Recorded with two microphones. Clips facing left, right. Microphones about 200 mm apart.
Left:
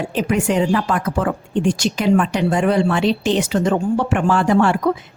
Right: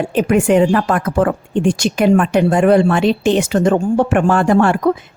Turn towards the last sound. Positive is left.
turn(degrees=-50)  # may be behind; listen again after turning